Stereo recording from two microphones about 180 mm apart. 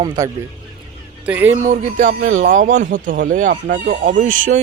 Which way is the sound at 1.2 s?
10° right (ahead or behind).